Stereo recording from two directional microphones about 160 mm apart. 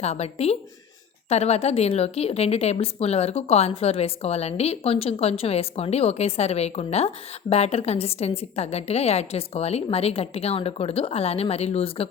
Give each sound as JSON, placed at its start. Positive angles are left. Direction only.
{"t": 0.0, "sound": "a woman's voice", "side_deg": 40}